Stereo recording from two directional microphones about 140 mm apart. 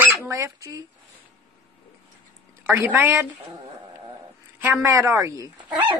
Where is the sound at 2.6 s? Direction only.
15° right (ahead or behind).